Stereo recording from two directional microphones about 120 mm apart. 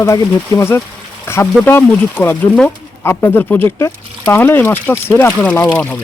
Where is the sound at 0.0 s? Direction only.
25° left (ahead or behind).